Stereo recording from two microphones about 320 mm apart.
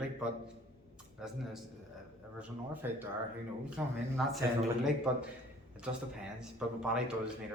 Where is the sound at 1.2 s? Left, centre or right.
Centre.